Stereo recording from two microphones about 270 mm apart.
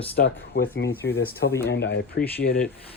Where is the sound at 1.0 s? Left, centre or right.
Left.